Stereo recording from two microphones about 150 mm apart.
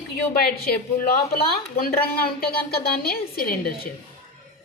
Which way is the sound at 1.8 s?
90° left.